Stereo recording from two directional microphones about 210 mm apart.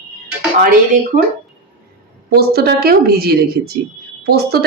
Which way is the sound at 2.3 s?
50° right (ahead or behind).